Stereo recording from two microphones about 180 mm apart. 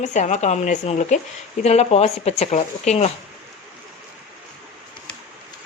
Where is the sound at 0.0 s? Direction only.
40° left (ahead or behind).